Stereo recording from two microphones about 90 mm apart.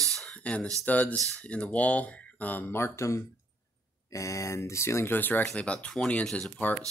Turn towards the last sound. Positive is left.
turn(degrees=15)  # may be behind; listen again after turning